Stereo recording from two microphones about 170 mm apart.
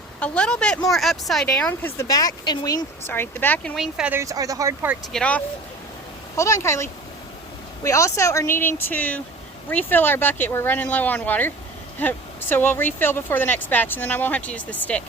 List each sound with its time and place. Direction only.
0.2 s speech: 5° left (ahead or behind)
2.0 s speech: 20° left (ahead or behind); by 4.2 s 5° right (ahead or behind)
4.2 s speech: 20° right (ahead or behind)
5.1 s speech: 5° left (ahead or behind)